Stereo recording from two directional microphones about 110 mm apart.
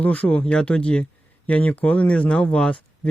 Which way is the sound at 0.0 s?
15° left (ahead or behind).